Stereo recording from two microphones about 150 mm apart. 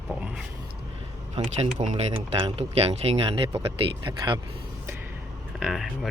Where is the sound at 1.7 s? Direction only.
55° right (ahead or behind).